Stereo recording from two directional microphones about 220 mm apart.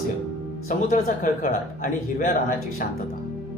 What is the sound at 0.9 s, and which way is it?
Speech, 40° left (ahead or behind).